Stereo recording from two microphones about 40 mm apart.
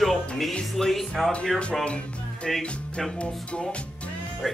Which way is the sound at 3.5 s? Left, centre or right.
Left.